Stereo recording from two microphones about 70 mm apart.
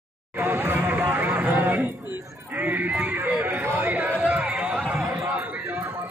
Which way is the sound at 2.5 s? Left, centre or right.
Right.